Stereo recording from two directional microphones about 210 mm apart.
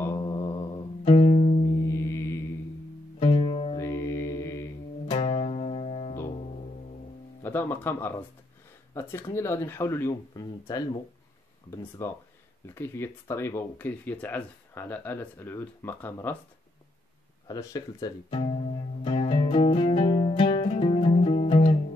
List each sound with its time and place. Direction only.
0.0 s mantra: 15° left (ahead or behind)
1.0 s music: 20° left (ahead or behind)
3.2 s music: 25° left (ahead or behind)
3.7 s music: 15° left (ahead or behind)
5.1 s music: 30° left (ahead or behind)
7.4 s music: 10° left (ahead or behind)
8.9 s speech: 10° left (ahead or behind)
12.0 s speech: 10° left (ahead or behind)
17.5 s speech: 20° left (ahead or behind)
19.0 s music: 25° left (ahead or behind)